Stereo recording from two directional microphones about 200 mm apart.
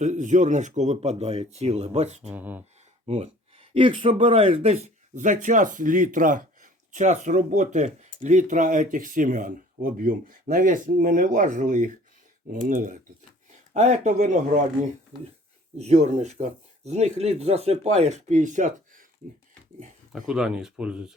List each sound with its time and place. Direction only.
0.0 s speech: 40° right (ahead or behind)
2.3 s speech: 10° right (ahead or behind)
3.1 s speech: 30° right (ahead or behind)
15.8 s speech: 35° right (ahead or behind)
20.1 s speech: 5° right (ahead or behind)